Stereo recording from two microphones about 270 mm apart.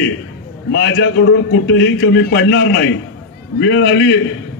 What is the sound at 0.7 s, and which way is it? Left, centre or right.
A man's voice, left.